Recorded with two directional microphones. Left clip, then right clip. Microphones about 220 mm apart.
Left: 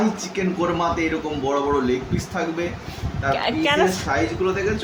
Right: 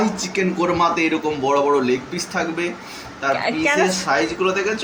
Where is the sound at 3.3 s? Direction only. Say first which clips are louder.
Right 1 dB; centre (ahead or behind).